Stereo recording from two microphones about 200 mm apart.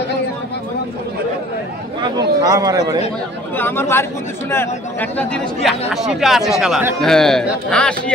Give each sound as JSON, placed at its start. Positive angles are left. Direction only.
{"t": 2.1, "sound": "a man's voice", "side_deg": -15}
{"t": 3.5, "sound": "speech", "side_deg": 10}
{"t": 5.1, "sound": "speech", "side_deg": 5}